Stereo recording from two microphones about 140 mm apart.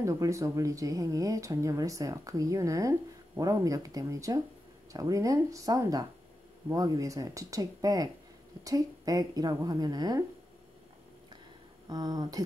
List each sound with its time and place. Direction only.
0.0 s speech: 20° right (ahead or behind)
11.9 s speech: 30° right (ahead or behind)